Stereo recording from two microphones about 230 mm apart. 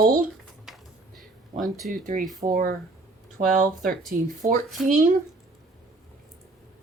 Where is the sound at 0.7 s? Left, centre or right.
Centre.